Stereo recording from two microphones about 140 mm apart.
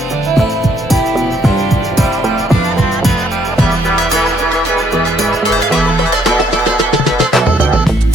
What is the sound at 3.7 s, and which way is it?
Music, centre (ahead or behind).